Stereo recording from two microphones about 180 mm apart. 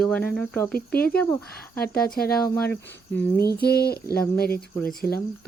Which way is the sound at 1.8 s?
60° left (ahead or behind).